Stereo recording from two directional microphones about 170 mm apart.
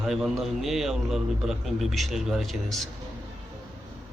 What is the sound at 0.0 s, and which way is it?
A man's voice, centre (ahead or behind).